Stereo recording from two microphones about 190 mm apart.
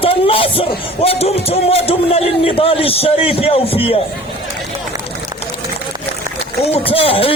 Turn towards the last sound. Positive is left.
turn(degrees=30)  # may be behind; listen again after turning